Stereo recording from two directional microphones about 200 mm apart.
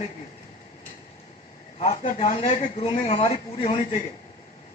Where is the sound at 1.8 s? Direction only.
30° left (ahead or behind).